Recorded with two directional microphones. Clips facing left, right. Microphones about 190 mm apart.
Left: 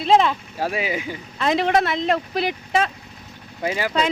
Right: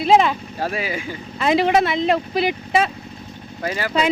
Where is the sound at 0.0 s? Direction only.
5° right (ahead or behind).